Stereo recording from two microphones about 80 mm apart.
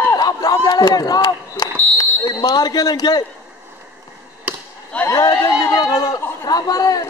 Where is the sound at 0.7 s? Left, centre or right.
Left.